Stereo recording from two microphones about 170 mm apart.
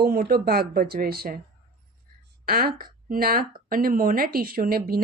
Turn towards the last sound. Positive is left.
turn(degrees=-60)  # may be behind; listen again after turning